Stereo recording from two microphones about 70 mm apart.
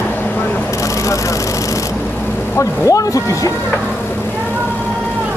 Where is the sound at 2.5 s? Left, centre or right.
Left.